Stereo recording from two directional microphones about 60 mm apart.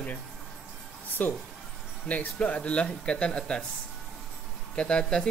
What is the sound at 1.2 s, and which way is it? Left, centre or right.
Speech, left.